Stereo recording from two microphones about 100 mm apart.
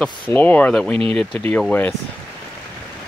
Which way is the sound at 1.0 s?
75° right (ahead or behind).